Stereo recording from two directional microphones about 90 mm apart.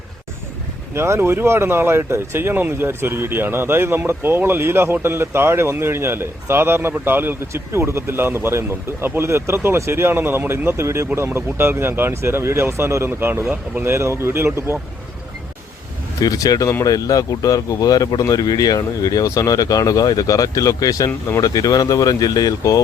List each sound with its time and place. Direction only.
0.9 s speech: 30° right (ahead or behind)
16.2 s speech: 40° left (ahead or behind)